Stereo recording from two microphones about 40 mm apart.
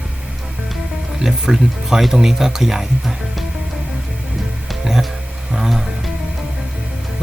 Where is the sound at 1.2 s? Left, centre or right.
Centre.